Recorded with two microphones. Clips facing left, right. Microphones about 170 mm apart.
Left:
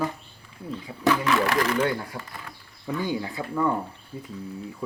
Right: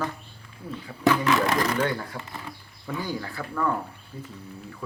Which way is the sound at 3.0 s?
20° left (ahead or behind).